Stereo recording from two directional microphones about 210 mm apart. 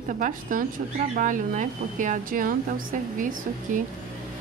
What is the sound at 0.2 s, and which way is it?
Speech, 40° right (ahead or behind).